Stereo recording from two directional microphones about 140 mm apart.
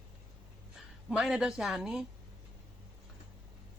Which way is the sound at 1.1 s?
5° right (ahead or behind).